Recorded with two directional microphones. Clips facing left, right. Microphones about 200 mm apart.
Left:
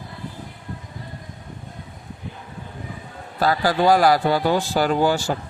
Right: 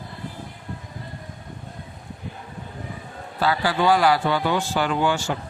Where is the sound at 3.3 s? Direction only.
40° left (ahead or behind).